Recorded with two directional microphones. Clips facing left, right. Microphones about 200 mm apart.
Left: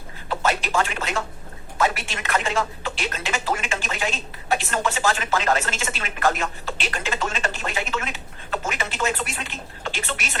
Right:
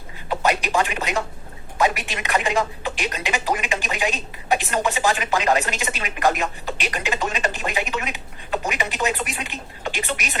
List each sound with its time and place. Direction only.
0.3 s speech: 15° right (ahead or behind)